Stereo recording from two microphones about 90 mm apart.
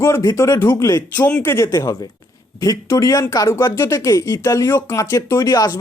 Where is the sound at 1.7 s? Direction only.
40° left (ahead or behind).